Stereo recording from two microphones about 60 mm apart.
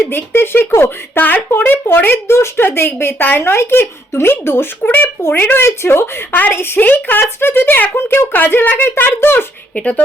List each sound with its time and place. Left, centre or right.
0.1 s a woman's voice: left
9.7 s speech: left